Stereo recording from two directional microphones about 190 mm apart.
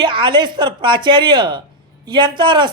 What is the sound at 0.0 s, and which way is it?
Speech, 25° right (ahead or behind).